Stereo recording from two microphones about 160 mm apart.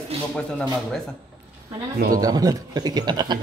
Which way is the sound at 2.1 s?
25° right (ahead or behind).